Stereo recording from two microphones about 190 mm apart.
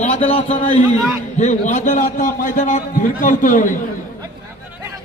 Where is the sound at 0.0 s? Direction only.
35° left (ahead or behind).